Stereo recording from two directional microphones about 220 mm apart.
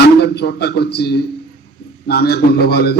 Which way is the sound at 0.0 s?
50° left (ahead or behind).